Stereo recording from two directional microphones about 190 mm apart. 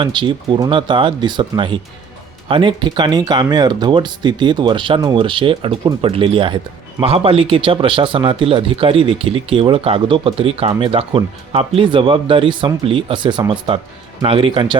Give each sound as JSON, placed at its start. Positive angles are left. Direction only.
{"t": 0.0, "sound": "speech", "side_deg": -25}